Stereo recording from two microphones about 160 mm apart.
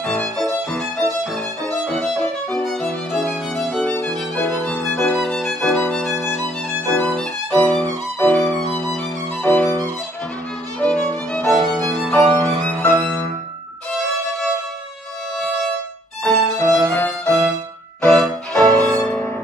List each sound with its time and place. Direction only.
0.0 s violin: 5° left (ahead or behind)
5.2 s music: 5° left (ahead or behind)
6.9 s violin: 5° left (ahead or behind)
16.3 s violin: 15° left (ahead or behind)
18.0 s music: 5° left (ahead or behind)